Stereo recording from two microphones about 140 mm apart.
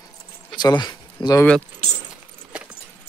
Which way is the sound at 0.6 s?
30° left (ahead or behind).